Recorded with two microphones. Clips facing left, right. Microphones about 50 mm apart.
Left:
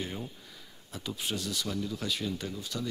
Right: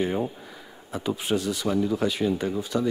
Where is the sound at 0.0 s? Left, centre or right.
Right.